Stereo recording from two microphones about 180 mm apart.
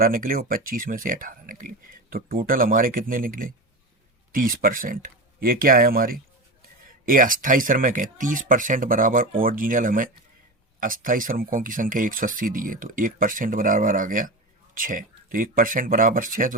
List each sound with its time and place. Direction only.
0.0 s speech: 50° right (ahead or behind)